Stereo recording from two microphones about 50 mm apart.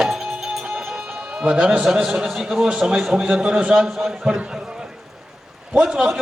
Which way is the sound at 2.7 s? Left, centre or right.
Centre.